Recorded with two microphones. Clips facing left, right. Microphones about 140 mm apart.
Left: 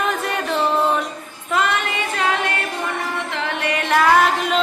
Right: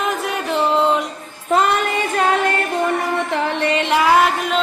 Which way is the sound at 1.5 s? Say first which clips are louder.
Right 4 dB; 40° right (ahead or behind).